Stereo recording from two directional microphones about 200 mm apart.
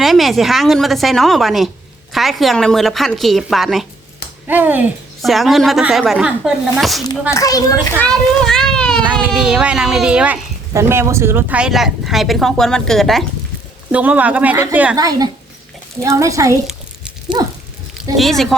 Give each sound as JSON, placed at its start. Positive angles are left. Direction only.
{"t": 0.0, "sound": "a woman's voice", "side_deg": 0}
{"t": 7.0, "sound": "a child's voice", "side_deg": 20}
{"t": 8.0, "sound": "a child's voice", "side_deg": 5}
{"t": 14.9, "sound": "speech", "side_deg": -20}
{"t": 18.2, "sound": "a woman's voice", "side_deg": 0}